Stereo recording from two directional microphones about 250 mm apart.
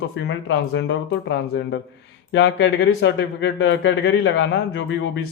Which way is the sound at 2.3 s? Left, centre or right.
Left.